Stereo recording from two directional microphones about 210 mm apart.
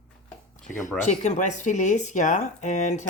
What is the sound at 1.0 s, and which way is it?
Speech, 35° left (ahead or behind).